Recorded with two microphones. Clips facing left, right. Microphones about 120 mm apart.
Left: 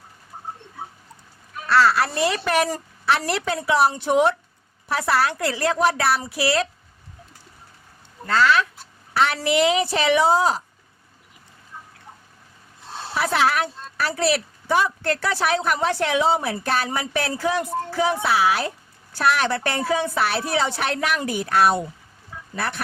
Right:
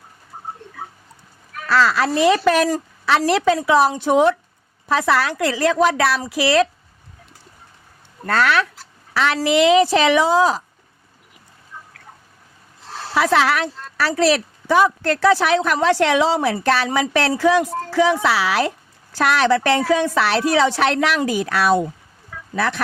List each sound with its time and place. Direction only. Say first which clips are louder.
1.6 s a woman's voice: right 1 dB; 90° right
4.9 s speech: right 3 dB; 90° right
8.3 s speech: right 1 dB; 60° right (ahead or behind)
9.1 s speech: right 3 dB; 90° right
12.9 s a sound: right 2 dB; 25° left (ahead or behind)
13.1 s speech: right 4 dB; 90° right